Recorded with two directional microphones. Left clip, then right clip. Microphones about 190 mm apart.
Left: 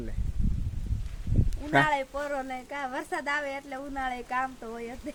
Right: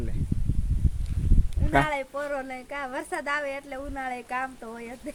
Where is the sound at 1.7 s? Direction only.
Centre (ahead or behind).